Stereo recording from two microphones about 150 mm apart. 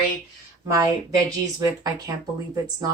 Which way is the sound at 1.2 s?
25° right (ahead or behind).